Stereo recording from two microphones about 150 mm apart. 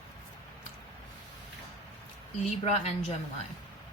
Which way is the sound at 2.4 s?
45° left (ahead or behind).